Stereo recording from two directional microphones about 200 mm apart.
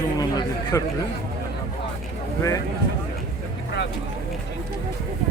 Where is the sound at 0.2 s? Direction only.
20° left (ahead or behind).